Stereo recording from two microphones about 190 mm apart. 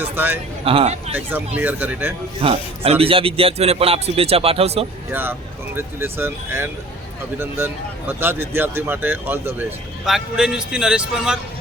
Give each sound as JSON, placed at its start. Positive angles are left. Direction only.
{"t": 0.0, "sound": "speech", "side_deg": -10}
{"t": 0.6, "sound": "speech", "side_deg": -30}
{"t": 1.5, "sound": "speech", "side_deg": -10}
{"t": 2.4, "sound": "a man's voice", "side_deg": -30}
{"t": 5.1, "sound": "speech", "side_deg": -10}